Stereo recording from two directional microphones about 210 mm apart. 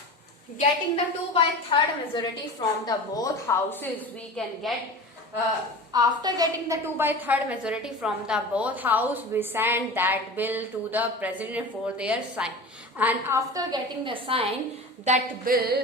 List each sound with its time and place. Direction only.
0.9 s a woman's voice: 25° left (ahead or behind); by 4.5 s 5° left (ahead or behind)
5.9 s a woman's voice: 20° right (ahead or behind)
15.0 s a sound: 40° right (ahead or behind)